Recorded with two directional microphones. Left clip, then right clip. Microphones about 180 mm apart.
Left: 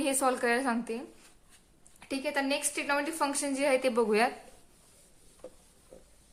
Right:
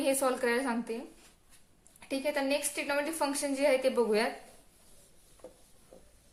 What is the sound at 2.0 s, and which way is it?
A woman's voice, 35° left (ahead or behind).